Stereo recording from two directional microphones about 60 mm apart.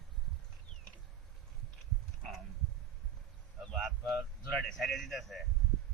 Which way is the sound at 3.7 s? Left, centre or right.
Centre.